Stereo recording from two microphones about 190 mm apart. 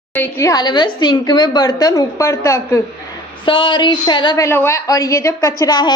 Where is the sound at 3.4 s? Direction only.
25° left (ahead or behind).